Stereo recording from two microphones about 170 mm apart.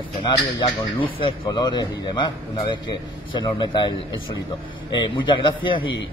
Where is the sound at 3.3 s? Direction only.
25° left (ahead or behind).